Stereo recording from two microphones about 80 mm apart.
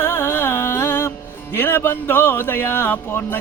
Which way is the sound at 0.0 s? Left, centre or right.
Left.